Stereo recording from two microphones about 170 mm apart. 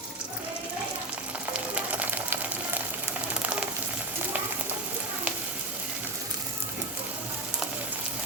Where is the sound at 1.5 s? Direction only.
10° right (ahead or behind).